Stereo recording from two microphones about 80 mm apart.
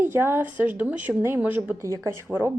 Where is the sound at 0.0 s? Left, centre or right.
Right.